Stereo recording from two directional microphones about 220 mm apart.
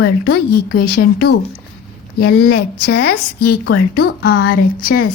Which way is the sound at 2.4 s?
45° left (ahead or behind).